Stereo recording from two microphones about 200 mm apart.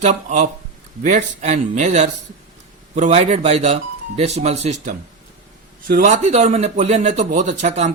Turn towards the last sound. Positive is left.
turn(degrees=-35)  # may be behind; listen again after turning